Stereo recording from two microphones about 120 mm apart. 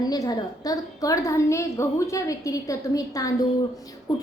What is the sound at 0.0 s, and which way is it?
A woman's voice, 35° left (ahead or behind).